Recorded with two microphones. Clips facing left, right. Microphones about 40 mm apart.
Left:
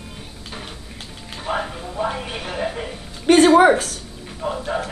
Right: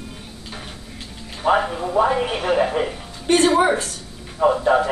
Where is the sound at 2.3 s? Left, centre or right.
Centre.